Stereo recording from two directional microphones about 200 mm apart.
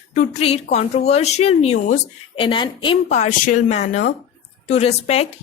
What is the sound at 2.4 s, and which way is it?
Speech, 25° left (ahead or behind).